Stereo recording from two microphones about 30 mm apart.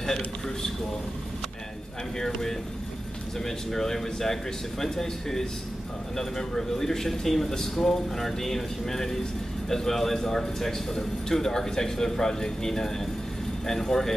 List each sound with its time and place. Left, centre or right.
2.1 s a man's voice: centre